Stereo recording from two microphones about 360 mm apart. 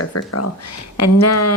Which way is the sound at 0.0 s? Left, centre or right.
Left.